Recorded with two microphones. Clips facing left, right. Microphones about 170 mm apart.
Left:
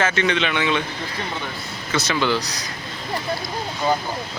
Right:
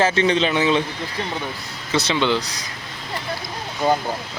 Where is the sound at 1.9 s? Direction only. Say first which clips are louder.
Right 2 dB; 30° right (ahead or behind).